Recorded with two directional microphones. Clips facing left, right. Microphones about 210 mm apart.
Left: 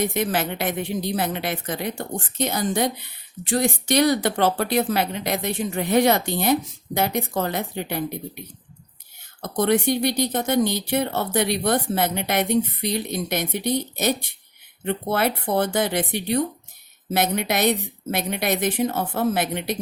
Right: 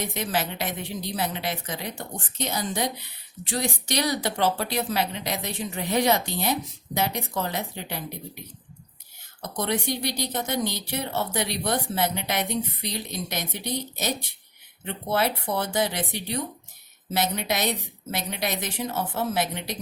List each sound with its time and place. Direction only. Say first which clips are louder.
0.1 s speech: left 5 dB; 55° left (ahead or behind)
9.4 s speech: left 7 dB; 55° left (ahead or behind)